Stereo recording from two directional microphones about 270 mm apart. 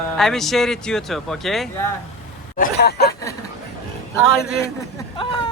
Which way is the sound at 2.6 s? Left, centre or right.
Left.